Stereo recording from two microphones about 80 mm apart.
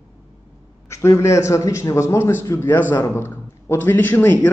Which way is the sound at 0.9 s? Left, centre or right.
Left.